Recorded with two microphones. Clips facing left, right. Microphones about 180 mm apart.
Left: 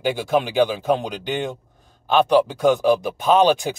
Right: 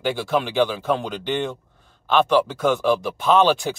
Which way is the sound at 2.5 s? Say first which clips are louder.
Left 3 dB; 15° left (ahead or behind).